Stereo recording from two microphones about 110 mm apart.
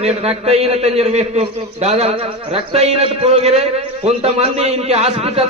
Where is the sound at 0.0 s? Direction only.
70° right (ahead or behind).